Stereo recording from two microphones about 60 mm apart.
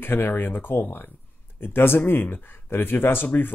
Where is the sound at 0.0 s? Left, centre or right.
Left.